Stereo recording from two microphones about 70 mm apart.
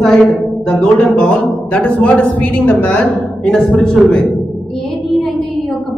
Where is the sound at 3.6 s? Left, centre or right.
Centre.